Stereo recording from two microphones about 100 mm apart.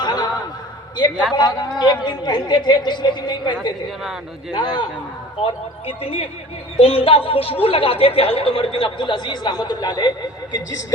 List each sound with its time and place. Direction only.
0.0 s chuckle: 45° left (ahead or behind)
0.9 s speech: 50° left (ahead or behind)
5.5 s speech: 75° left (ahead or behind); by 10.1 s 40° left (ahead or behind)